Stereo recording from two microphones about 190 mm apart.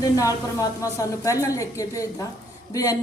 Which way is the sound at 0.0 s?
20° left (ahead or behind).